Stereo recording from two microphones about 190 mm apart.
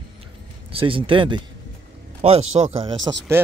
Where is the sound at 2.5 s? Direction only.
30° right (ahead or behind).